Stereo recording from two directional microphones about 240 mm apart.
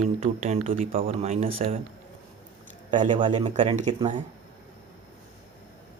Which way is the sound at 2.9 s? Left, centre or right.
Centre.